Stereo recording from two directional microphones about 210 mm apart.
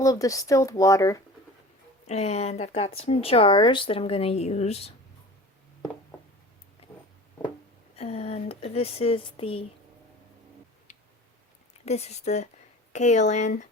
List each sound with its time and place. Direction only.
0.0 s speech: 15° left (ahead or behind)
2.0 s speech: 30° left (ahead or behind)
7.9 s speech: 30° left (ahead or behind)
11.9 s speech: 30° left (ahead or behind)